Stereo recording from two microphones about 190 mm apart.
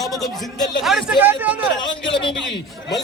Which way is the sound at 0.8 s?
Centre (ahead or behind).